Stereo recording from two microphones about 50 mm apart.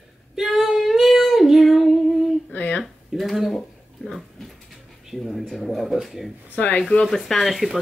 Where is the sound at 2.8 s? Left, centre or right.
Centre.